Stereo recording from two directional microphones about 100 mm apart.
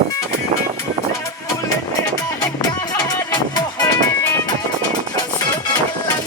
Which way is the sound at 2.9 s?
45° left (ahead or behind).